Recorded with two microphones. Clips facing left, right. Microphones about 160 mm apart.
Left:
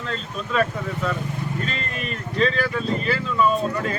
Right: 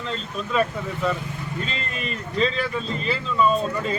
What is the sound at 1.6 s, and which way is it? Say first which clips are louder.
Speech: left 1 dB; 45° left (ahead or behind).